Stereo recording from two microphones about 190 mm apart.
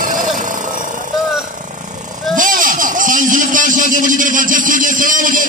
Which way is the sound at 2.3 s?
45° right (ahead or behind).